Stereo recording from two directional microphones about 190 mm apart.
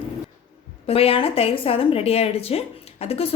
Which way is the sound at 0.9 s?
30° left (ahead or behind).